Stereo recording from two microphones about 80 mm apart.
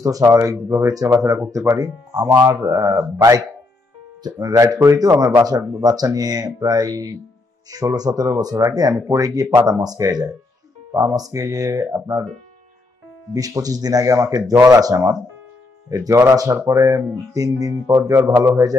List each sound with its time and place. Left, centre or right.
0.0 s speech: right
13.3 s speech: right